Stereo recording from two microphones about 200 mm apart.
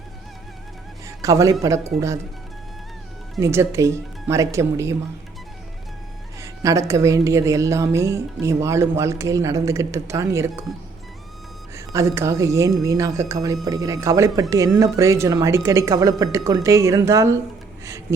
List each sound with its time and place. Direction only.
1.0 s a sound: 15° right (ahead or behind)
1.6 s a woman's voice: 15° right (ahead or behind)
3.4 s a woman's voice: 15° right (ahead or behind)
6.4 s a woman's voice: 15° right (ahead or behind)
11.9 s a woman's voice: 15° right (ahead or behind)